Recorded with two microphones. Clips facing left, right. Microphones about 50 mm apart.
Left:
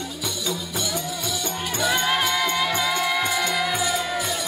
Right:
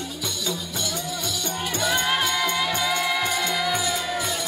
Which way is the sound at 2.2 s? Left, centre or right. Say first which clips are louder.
Left 1 dB; centre.